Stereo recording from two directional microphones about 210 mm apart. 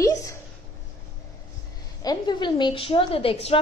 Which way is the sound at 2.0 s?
20° left (ahead or behind).